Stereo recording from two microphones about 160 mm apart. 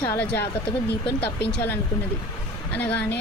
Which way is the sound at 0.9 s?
90° left.